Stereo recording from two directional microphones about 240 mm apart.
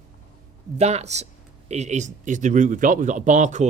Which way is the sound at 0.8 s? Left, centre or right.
Right.